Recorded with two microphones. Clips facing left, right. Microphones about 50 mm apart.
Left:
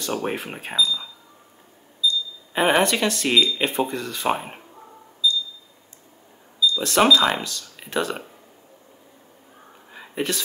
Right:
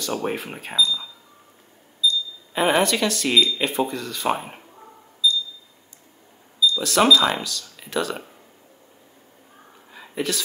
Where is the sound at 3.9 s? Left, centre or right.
Left.